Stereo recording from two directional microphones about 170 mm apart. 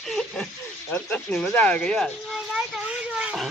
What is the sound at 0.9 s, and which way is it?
Speech, 5° left (ahead or behind).